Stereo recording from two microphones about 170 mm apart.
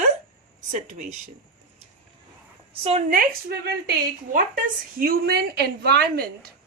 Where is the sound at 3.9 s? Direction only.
55° right (ahead or behind).